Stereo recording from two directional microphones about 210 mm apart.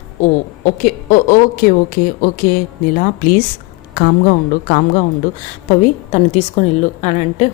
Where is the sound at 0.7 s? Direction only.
40° left (ahead or behind).